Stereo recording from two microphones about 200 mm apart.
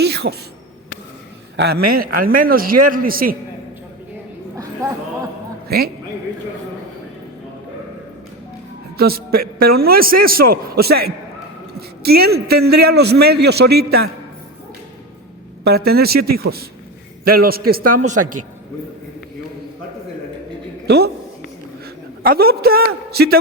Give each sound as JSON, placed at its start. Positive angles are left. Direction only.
{"t": 0.0, "sound": "a sound", "side_deg": -55}
{"t": 1.5, "sound": "a man's voice", "side_deg": -55}
{"t": 4.5, "sound": "a sound", "side_deg": -15}
{"t": 5.6, "sound": "a man's voice", "side_deg": -50}
{"t": 9.0, "sound": "a man's voice", "side_deg": -50}
{"t": 15.6, "sound": "a man's voice", "side_deg": -50}
{"t": 20.8, "sound": "a man's voice", "side_deg": -55}